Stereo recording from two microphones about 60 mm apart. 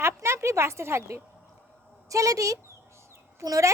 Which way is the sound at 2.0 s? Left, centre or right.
Right.